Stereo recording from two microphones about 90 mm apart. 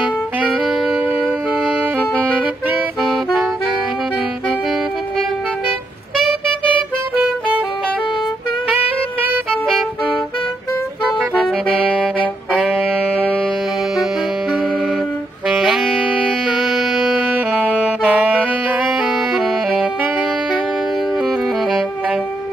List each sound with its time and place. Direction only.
7.2 s music: 15° right (ahead or behind)
15.4 s saxophone: 5° right (ahead or behind)
16.5 s music: centre (ahead or behind)
17.3 s saxophone: 20° right (ahead or behind)
18.9 s saxophone: 5° right (ahead or behind)